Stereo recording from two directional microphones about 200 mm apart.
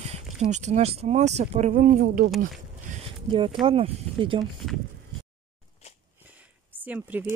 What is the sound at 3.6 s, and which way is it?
Speech, 25° right (ahead or behind).